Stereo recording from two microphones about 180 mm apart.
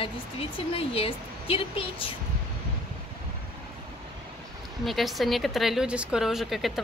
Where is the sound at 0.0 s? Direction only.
30° left (ahead or behind).